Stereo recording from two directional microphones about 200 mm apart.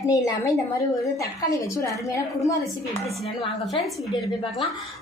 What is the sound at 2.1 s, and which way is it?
Speech, 15° left (ahead or behind).